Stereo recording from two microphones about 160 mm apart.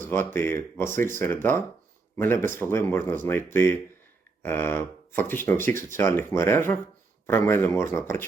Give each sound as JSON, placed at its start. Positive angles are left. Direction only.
{"t": 0.0, "sound": "speech", "side_deg": 15}